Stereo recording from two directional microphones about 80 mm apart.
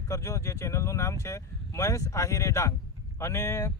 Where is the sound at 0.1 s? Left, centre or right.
Left.